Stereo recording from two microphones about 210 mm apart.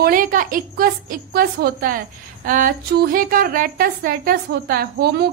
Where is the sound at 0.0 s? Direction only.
40° right (ahead or behind).